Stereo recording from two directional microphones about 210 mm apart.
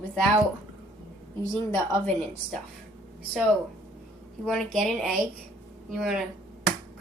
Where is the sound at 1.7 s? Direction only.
5° left (ahead or behind).